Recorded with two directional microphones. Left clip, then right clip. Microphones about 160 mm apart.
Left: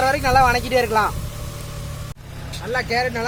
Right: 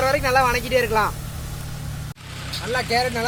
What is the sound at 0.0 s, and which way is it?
Speech, 30° left (ahead or behind).